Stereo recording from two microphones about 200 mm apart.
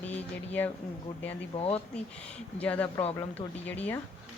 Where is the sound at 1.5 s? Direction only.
30° left (ahead or behind).